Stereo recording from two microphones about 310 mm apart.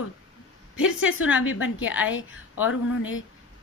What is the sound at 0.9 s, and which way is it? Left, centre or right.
Speech, left.